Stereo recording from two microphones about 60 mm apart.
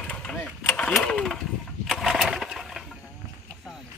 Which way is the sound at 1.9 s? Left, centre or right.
Centre.